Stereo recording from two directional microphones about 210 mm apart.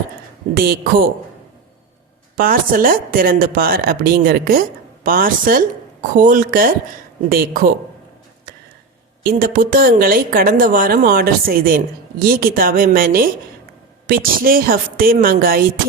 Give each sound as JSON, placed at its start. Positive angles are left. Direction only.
{"t": 0.5, "sound": "a woman's voice", "side_deg": -45}
{"t": 2.4, "sound": "a woman's voice", "side_deg": -45}
{"t": 9.2, "sound": "a woman's voice", "side_deg": -45}